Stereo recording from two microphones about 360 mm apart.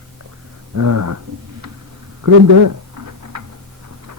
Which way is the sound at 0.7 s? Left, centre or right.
Right.